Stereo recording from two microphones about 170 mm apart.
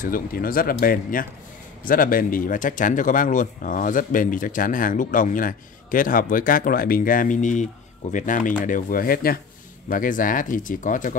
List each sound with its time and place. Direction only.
0.0 s speech: 55° left (ahead or behind)